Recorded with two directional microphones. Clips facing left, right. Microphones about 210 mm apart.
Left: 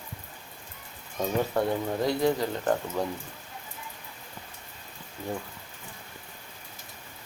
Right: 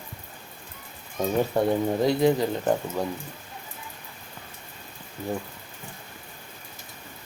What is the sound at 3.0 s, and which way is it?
Speech, centre (ahead or behind).